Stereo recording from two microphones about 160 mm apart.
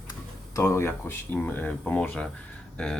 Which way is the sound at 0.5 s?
15° left (ahead or behind).